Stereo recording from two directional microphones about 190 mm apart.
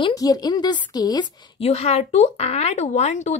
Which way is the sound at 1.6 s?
35° left (ahead or behind).